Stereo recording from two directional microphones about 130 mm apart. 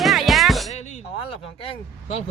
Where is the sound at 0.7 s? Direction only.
60° left (ahead or behind).